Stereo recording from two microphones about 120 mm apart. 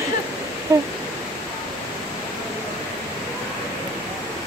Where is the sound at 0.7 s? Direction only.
25° right (ahead or behind).